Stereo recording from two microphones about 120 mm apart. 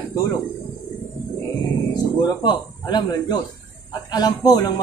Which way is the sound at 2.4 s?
35° left (ahead or behind).